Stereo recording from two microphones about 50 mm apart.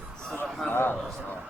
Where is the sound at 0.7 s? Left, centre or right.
Left.